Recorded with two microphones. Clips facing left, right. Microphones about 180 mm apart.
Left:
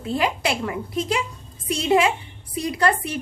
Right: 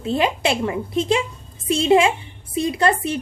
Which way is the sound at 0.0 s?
25° right (ahead or behind).